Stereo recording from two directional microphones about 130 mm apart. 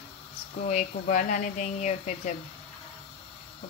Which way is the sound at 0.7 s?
70° left (ahead or behind).